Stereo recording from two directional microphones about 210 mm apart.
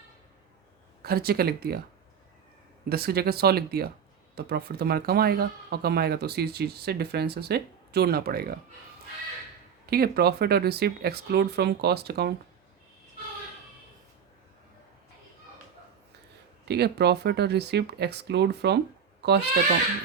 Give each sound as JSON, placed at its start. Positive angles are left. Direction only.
{"t": 1.0, "sound": "speech", "side_deg": -45}
{"t": 2.9, "sound": "speech", "side_deg": -45}
{"t": 9.8, "sound": "speech", "side_deg": -45}
{"t": 16.6, "sound": "speech", "side_deg": -50}